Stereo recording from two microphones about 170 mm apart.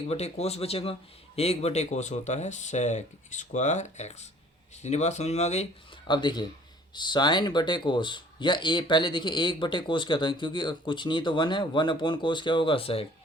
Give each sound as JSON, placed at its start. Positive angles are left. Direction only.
{"t": 0.1, "sound": "speech", "side_deg": 40}
{"t": 6.1, "sound": "speech", "side_deg": 25}